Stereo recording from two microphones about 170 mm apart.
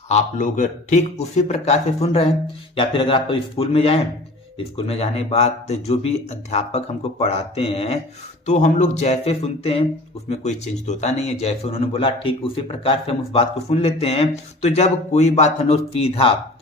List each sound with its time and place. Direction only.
0.1 s speech: 45° left (ahead or behind)